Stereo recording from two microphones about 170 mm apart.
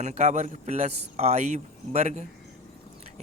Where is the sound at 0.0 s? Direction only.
40° right (ahead or behind).